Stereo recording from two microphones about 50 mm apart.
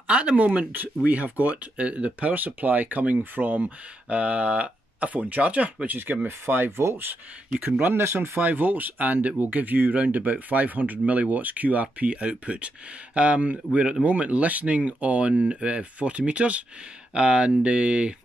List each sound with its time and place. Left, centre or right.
0.0 s speech: right
7.9 s speech: right
8.4 s speech: right